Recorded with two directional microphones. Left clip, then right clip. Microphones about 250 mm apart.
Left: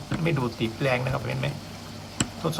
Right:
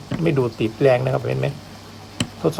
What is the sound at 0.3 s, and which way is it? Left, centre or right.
Speech, right.